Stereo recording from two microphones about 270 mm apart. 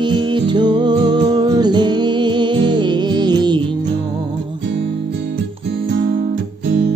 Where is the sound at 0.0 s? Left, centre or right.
Centre.